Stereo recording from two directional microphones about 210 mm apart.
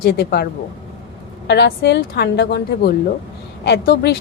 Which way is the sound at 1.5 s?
55° left (ahead or behind).